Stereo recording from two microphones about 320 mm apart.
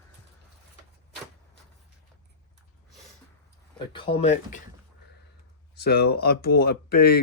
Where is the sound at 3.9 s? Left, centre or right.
Centre.